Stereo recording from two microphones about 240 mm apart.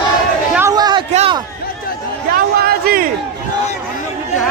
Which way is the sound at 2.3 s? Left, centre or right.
Right.